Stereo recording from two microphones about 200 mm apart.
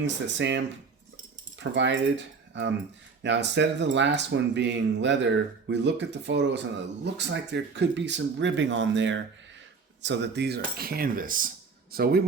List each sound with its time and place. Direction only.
0.0 s speech: 60° right (ahead or behind)
10.0 s cutlery: 60° right (ahead or behind)